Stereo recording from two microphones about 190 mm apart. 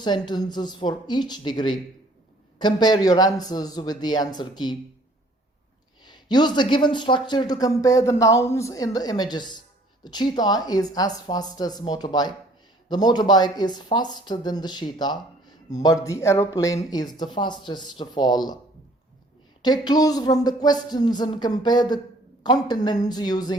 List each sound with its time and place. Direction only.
0.0 s speech: 25° left (ahead or behind)
6.1 s speech: 25° left (ahead or behind)
19.6 s speech: 20° left (ahead or behind)